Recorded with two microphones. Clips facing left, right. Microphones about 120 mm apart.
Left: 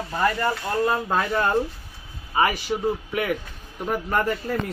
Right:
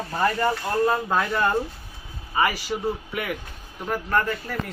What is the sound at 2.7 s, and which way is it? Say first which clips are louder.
Speech: left 2 dB; 15° left (ahead or behind).